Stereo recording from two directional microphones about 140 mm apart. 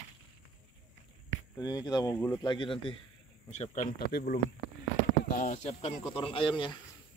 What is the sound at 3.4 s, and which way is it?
Speech, 50° left (ahead or behind).